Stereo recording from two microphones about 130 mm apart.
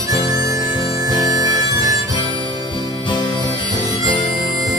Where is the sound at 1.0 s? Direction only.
30° right (ahead or behind).